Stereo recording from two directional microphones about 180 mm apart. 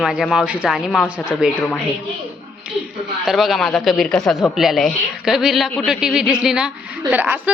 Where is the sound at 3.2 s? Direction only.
Centre (ahead or behind).